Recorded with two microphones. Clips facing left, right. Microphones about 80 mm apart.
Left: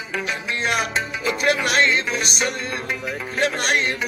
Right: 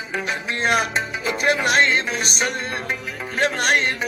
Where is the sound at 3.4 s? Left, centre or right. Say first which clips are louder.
Right 2 dB; right.